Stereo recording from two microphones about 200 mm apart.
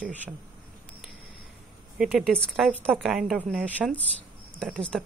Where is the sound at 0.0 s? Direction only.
5° right (ahead or behind).